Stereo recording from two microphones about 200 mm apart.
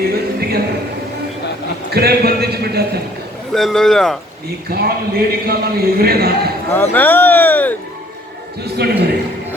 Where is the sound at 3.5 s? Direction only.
Centre (ahead or behind).